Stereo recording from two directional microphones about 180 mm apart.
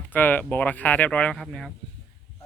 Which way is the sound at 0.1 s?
10° left (ahead or behind).